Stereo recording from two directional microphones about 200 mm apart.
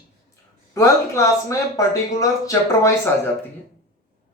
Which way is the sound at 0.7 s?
15° left (ahead or behind).